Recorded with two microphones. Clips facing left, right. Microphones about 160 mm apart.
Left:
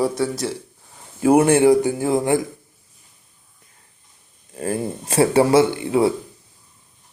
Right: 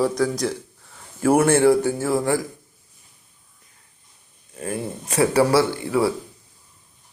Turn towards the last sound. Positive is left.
turn(degrees=20)  # may be behind; listen again after turning